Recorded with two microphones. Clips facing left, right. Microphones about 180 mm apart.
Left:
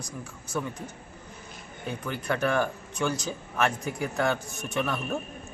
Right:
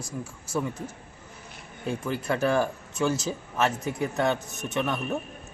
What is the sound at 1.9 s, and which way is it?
Speech, 30° right (ahead or behind).